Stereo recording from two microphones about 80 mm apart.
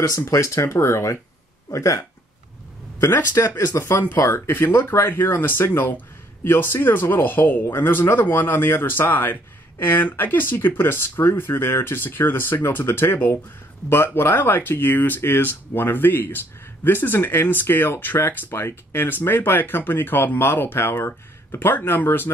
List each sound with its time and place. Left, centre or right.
0.3 s speech: left